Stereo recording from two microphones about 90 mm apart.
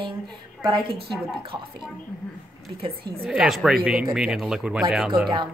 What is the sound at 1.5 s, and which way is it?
Speech, 40° right (ahead or behind).